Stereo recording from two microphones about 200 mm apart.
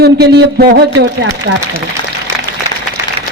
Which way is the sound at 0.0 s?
55° right (ahead or behind).